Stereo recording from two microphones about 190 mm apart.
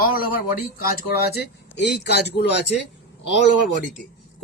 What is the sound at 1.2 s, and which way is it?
Speech, 60° left (ahead or behind).